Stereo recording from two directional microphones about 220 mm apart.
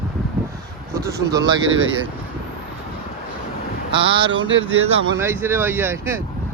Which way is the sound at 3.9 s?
20° right (ahead or behind).